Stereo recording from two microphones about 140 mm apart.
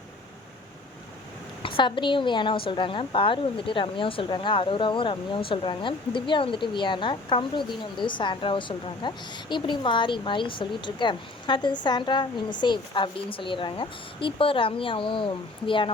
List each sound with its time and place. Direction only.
1.6 s a woman's voice: 35° left (ahead or behind)